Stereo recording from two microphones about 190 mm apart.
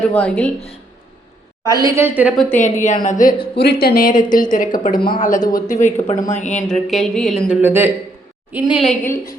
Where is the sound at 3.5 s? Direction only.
55° left (ahead or behind).